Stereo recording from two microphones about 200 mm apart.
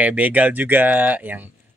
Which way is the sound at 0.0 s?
5° right (ahead or behind).